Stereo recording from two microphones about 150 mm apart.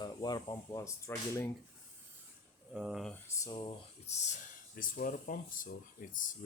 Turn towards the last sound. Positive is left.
turn(degrees=60)  # may be behind; listen again after turning